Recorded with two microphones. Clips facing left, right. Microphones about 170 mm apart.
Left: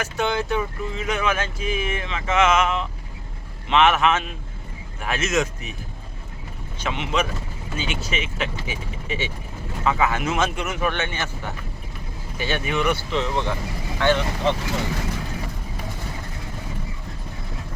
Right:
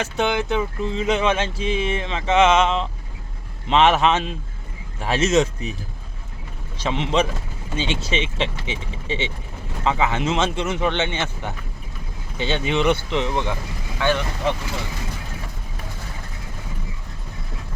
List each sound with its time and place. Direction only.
0.0 s speech: 20° right (ahead or behind)
6.7 s speech: 35° right (ahead or behind); by 14.5 s 15° right (ahead or behind)